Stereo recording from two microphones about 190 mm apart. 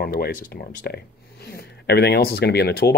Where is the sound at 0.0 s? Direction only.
50° left (ahead or behind).